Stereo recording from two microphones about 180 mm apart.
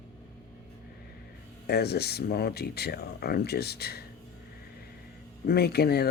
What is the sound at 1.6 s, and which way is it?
Speech, 60° left (ahead or behind).